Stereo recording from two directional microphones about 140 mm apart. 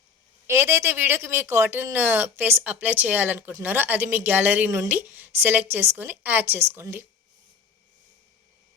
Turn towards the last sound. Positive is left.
turn(degrees=-15)  # may be behind; listen again after turning